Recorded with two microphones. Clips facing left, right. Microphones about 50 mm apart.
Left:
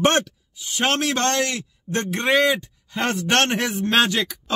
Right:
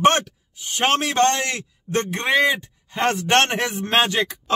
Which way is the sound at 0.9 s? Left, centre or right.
Centre.